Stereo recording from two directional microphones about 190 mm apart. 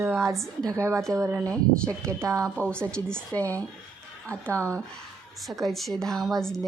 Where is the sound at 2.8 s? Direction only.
5° left (ahead or behind).